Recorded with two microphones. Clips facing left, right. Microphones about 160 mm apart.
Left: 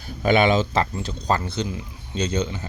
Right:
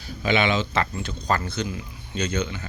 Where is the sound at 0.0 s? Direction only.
45° left (ahead or behind).